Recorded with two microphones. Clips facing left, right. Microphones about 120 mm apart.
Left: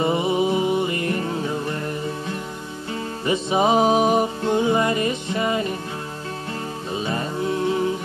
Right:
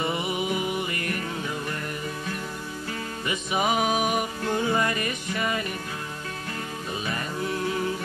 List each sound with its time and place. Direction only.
0.0 s music: 30° left (ahead or behind)
3.3 s music: 30° left (ahead or behind)
6.9 s music: 25° left (ahead or behind)